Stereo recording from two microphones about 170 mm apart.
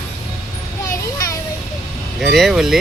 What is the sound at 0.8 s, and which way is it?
Children playing, 20° left (ahead or behind).